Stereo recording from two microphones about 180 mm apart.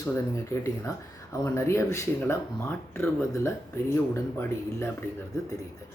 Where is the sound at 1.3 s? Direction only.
15° left (ahead or behind).